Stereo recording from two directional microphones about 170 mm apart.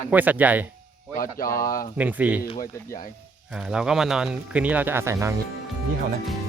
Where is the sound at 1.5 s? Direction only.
20° left (ahead or behind).